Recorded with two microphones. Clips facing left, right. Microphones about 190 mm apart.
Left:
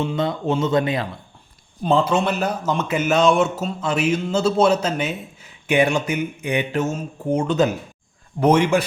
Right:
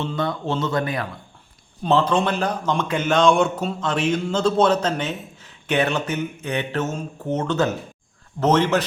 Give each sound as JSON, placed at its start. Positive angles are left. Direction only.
{"t": 0.0, "sound": "speech", "side_deg": 20}
{"t": 1.8, "sound": "a man's voice", "side_deg": 10}